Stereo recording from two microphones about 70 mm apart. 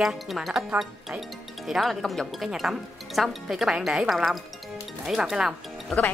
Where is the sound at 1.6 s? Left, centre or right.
Centre.